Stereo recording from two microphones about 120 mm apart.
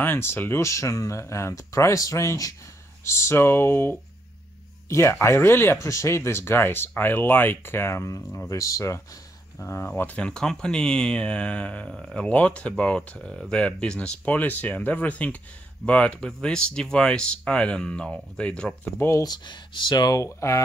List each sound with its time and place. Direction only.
0.0 s speech: 20° left (ahead or behind)
18.9 s speech: 25° left (ahead or behind)